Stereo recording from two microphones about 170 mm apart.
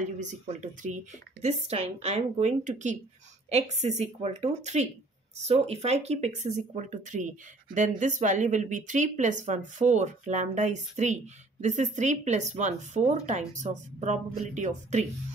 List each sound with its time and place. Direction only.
0.2 s a woman's voice: 45° right (ahead or behind)